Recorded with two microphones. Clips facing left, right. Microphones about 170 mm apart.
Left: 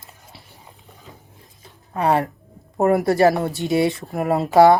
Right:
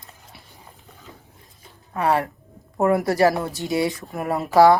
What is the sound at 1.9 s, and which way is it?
Speech, 25° left (ahead or behind).